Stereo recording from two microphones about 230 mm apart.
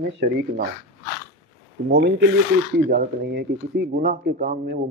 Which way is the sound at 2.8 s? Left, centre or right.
Right.